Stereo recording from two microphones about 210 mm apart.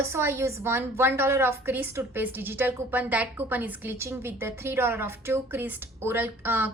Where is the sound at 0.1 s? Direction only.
10° right (ahead or behind).